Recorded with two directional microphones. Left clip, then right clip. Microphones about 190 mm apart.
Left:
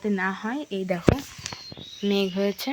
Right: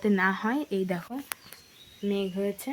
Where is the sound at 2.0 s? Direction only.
30° left (ahead or behind).